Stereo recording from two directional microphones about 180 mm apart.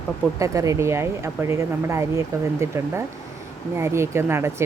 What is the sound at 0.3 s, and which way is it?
Speech, 20° right (ahead or behind).